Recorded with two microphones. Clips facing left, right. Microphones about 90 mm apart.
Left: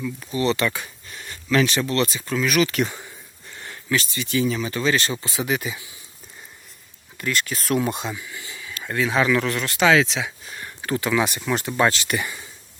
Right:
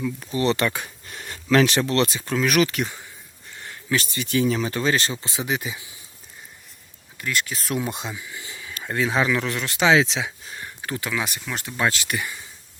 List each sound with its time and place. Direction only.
0.4 s speech: 50° right (ahead or behind)
1.9 s speech: 60° right (ahead or behind)
2.7 s speech: centre (ahead or behind)
3.9 s speech: 50° right (ahead or behind); by 5.8 s 20° right (ahead or behind)
7.2 s speech: 5° right (ahead or behind)
8.4 s a sound: 30° right (ahead or behind)
8.8 s speech: 20° right (ahead or behind)
10.8 s speech: 5° right (ahead or behind)